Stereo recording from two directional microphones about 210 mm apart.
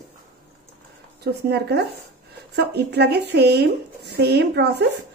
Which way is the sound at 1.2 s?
50° right (ahead or behind).